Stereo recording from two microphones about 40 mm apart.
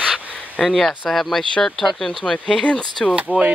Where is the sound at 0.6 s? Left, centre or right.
Centre.